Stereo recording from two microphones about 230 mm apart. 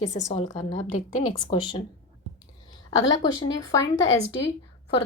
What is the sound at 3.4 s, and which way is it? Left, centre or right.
Speech, centre.